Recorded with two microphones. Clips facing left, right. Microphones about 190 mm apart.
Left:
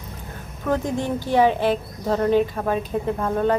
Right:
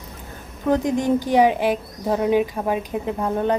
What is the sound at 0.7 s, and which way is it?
Speech, 15° right (ahead or behind).